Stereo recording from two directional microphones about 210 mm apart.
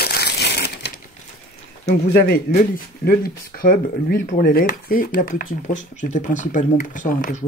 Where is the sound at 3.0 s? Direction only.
45° left (ahead or behind).